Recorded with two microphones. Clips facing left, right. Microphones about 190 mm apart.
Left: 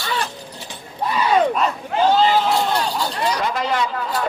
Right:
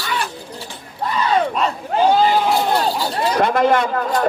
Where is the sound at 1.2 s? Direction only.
10° left (ahead or behind).